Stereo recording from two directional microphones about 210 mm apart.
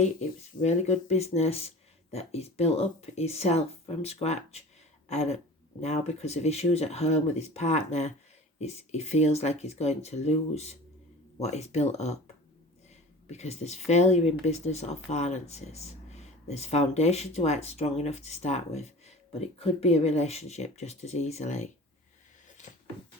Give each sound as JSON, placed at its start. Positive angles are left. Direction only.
{"t": 0.0, "sound": "speech", "side_deg": 35}
{"t": 5.0, "sound": "a sound", "side_deg": 30}
{"t": 5.8, "sound": "speech", "side_deg": 30}
{"t": 13.3, "sound": "speech", "side_deg": 30}